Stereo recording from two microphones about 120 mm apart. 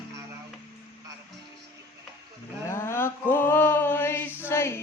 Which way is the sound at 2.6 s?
20° left (ahead or behind).